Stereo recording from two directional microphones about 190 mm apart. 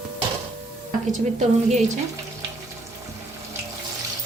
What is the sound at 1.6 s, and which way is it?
Speech, 35° right (ahead or behind).